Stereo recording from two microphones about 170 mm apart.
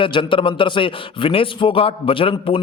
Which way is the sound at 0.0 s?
30° left (ahead or behind).